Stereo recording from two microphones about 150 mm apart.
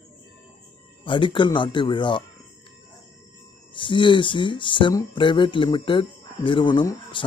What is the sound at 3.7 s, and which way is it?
Speech, 35° left (ahead or behind).